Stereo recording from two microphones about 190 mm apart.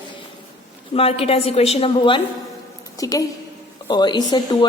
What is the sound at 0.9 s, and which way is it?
A woman's voice, 30° left (ahead or behind).